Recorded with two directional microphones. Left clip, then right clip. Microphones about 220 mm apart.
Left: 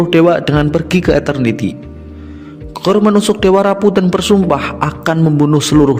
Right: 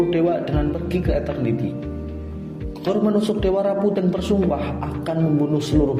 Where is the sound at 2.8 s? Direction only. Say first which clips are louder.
Left 9 dB; 45° left (ahead or behind).